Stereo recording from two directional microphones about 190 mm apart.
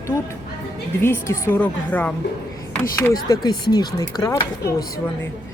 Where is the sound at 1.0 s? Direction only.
15° left (ahead or behind).